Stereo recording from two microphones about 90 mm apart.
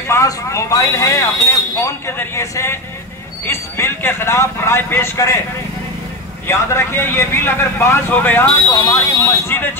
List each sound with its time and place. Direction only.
0.1 s speech: 35° left (ahead or behind)
6.4 s speech: 30° left (ahead or behind)
8.5 s speech: 40° left (ahead or behind)